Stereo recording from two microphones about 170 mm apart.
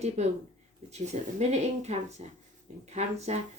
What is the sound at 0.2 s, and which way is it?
Speech, 40° right (ahead or behind).